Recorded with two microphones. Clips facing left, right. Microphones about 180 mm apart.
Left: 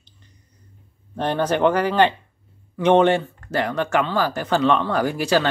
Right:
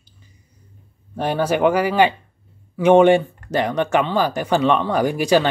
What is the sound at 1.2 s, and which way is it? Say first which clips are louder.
Speech: right 1 dB; 10° right (ahead or behind).